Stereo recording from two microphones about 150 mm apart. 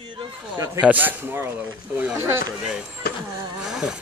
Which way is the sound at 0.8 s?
10° right (ahead or behind).